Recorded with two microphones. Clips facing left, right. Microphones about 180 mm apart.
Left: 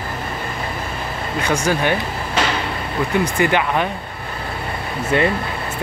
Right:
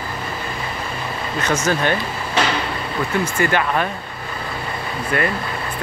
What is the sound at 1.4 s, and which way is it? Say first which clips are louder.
Speech: left 1 dB; 10° left (ahead or behind).